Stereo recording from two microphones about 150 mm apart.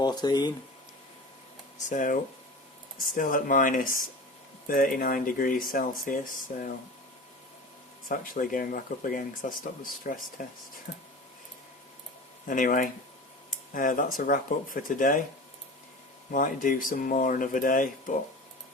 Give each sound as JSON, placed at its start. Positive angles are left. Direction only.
{"t": 0.0, "sound": "speech", "side_deg": 25}
{"t": 1.9, "sound": "speech", "side_deg": 60}
{"t": 3.2, "sound": "speech", "side_deg": 60}
{"t": 8.0, "sound": "speech", "side_deg": 65}
{"t": 12.5, "sound": "speech", "side_deg": 60}
{"t": 16.3, "sound": "speech", "side_deg": 65}